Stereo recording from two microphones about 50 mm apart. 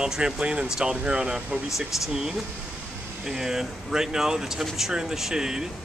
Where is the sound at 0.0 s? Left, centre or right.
Centre.